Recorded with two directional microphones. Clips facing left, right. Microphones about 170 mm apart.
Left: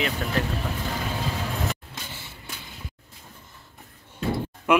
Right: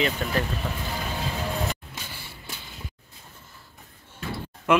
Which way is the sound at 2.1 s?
20° left (ahead or behind).